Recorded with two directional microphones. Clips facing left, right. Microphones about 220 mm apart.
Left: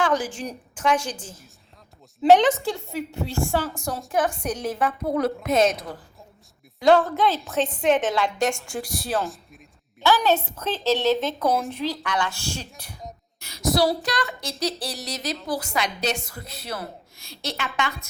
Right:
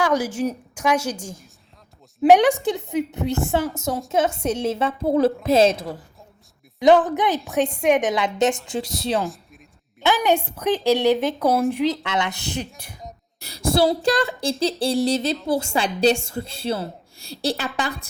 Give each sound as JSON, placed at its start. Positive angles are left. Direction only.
{"t": 0.0, "sound": "speech", "side_deg": -10}
{"t": 2.2, "sound": "speech", "side_deg": -15}
{"t": 6.7, "sound": "speech", "side_deg": -20}
{"t": 9.2, "sound": "speech", "side_deg": 0}
{"t": 10.0, "sound": "speech", "side_deg": -15}
{"t": 12.8, "sound": "cough", "side_deg": -5}
{"t": 13.4, "sound": "speech", "side_deg": -30}